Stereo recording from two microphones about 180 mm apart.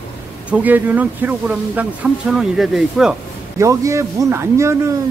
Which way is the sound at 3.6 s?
15° right (ahead or behind).